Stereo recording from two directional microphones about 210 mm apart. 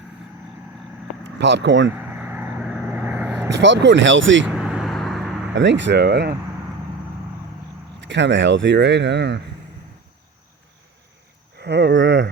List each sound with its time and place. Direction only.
1.2 s speech: 55° right (ahead or behind)
2.0 s vehicle: 10° right (ahead or behind)
3.5 s speech: 55° right (ahead or behind)
4.4 s vehicle: 5° right (ahead or behind)
5.5 s speech: 60° right (ahead or behind)
8.0 s speech: 60° right (ahead or behind)
11.6 s speech: 55° right (ahead or behind)